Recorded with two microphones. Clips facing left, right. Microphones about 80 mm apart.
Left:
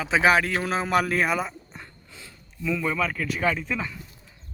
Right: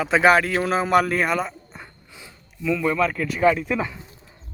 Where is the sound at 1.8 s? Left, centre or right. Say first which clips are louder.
Right 2 dB; centre.